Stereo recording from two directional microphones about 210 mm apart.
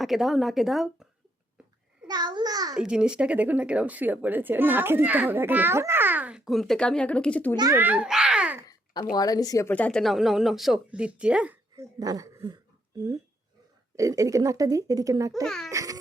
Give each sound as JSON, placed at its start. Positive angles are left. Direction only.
{"t": 0.0, "sound": "speech", "side_deg": 0}
{"t": 2.0, "sound": "a child's voice", "side_deg": -20}
{"t": 2.7, "sound": "speech", "side_deg": -5}
{"t": 7.5, "sound": "babbling", "side_deg": -15}
{"t": 8.7, "sound": "a sound", "side_deg": 20}
{"t": 9.1, "sound": "speech", "side_deg": 20}
{"t": 11.9, "sound": "speech", "side_deg": -15}
{"t": 13.9, "sound": "speech", "side_deg": -15}
{"t": 15.4, "sound": "speech", "side_deg": 0}
{"t": 15.7, "sound": "music", "side_deg": -15}